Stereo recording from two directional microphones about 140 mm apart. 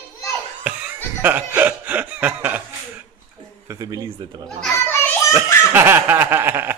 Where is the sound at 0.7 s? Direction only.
15° right (ahead or behind).